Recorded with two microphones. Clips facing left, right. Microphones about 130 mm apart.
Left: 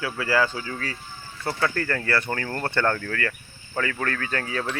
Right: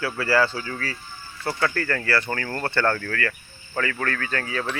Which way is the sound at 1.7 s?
20° left (ahead or behind).